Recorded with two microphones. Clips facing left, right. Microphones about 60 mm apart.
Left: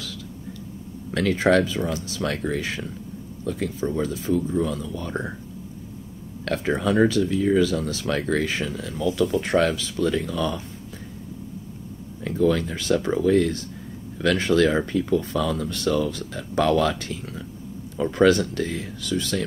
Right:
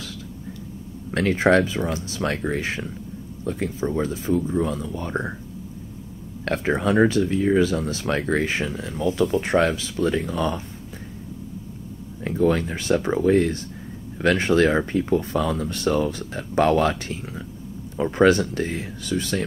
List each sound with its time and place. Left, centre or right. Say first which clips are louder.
1.1 s speech: right 1 dB; right
4.8 s speech: right 1 dB; right
6.4 s speech: right 1 dB; right
12.3 s speech: right 1 dB; right